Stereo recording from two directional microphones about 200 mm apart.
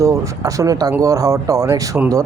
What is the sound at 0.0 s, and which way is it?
A man's voice, 15° right (ahead or behind).